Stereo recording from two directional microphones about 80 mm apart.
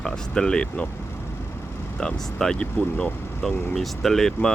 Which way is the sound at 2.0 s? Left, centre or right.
Centre.